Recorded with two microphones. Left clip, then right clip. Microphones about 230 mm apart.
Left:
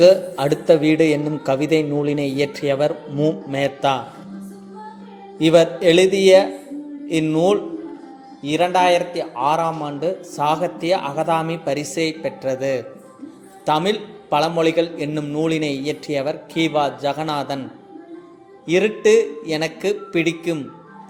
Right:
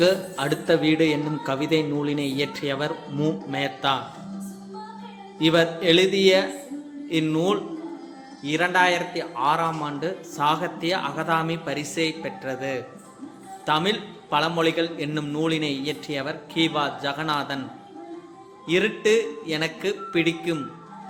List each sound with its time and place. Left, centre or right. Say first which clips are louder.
0.0 s a man's voice: left 9 dB; centre
5.4 s a man's voice: left 6 dB; centre
18.7 s a man's voice: left 6 dB; centre